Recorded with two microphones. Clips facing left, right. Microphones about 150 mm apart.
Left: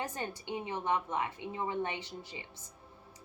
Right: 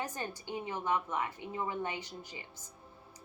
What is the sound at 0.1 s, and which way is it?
A woman's voice, 25° left (ahead or behind).